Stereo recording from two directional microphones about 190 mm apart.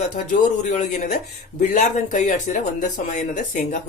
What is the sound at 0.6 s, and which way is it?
Speech, 40° left (ahead or behind).